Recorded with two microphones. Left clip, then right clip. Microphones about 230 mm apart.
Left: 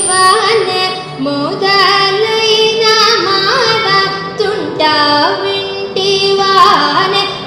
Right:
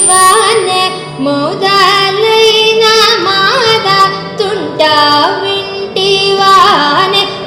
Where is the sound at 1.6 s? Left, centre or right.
Right.